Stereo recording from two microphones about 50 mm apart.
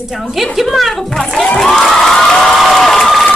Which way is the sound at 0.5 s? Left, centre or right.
Centre.